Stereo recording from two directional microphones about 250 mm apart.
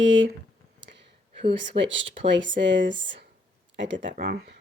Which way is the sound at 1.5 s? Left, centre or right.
Right.